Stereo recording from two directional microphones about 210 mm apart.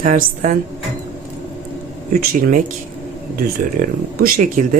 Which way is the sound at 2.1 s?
40° right (ahead or behind).